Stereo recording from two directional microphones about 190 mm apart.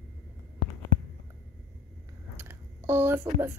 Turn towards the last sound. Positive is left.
turn(degrees=-15)  # may be behind; listen again after turning